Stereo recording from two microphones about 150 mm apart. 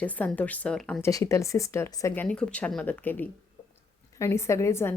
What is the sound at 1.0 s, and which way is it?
A woman's voice, 20° left (ahead or behind).